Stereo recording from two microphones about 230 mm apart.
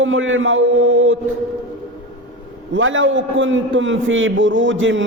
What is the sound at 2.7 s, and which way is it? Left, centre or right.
A man's voice, right.